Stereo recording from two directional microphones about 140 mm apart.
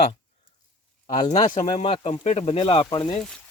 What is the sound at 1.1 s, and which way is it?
Speech, 60° left (ahead or behind).